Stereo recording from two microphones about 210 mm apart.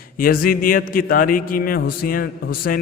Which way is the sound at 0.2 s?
45° left (ahead or behind).